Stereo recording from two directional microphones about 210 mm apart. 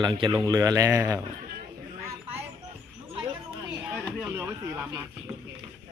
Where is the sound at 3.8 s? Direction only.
5° right (ahead or behind).